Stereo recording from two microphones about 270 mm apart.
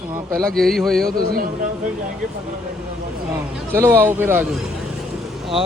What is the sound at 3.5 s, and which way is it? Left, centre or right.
A man's voice, centre.